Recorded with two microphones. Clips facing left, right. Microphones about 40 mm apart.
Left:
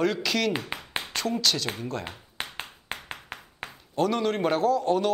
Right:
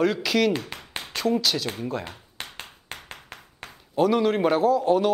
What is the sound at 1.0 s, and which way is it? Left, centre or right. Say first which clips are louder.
Speech: right 4 dB; centre.